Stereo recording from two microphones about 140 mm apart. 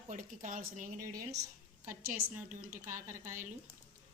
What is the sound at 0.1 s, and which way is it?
Speech, 65° right (ahead or behind).